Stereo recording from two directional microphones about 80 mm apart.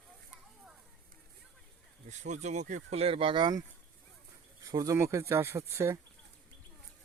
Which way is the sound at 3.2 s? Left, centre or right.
Right.